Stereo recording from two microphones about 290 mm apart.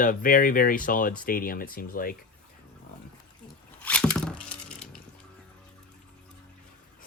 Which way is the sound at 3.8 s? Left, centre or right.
Centre.